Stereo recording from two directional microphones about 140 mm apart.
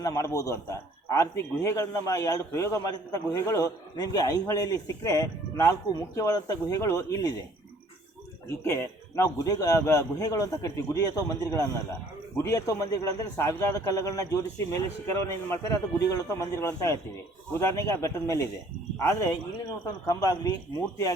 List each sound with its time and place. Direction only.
0.0 s a man's voice: 25° left (ahead or behind)
8.4 s a man's voice: 20° left (ahead or behind)